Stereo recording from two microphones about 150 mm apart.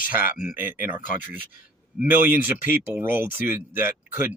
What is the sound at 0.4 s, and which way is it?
Speech, 10° right (ahead or behind).